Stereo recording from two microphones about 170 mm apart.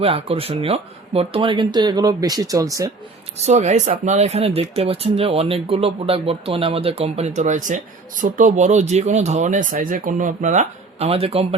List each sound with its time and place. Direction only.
0.0 s speech: 35° right (ahead or behind); by 2.9 s 20° right (ahead or behind)
3.3 s speech: 40° right (ahead or behind)